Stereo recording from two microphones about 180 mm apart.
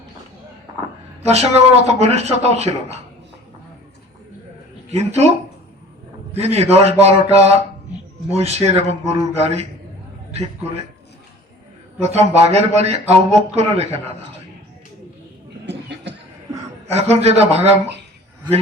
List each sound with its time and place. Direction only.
1.3 s a man's voice: 35° right (ahead or behind)
4.9 s a man's voice: 35° right (ahead or behind)
6.3 s a man's voice: 35° right (ahead or behind)
11.9 s a man's voice: 35° right (ahead or behind)
15.6 s cough: 75° right (ahead or behind)
16.8 s a man's voice: 35° right (ahead or behind)